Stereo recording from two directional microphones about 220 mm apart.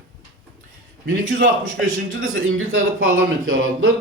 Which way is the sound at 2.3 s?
65° right (ahead or behind).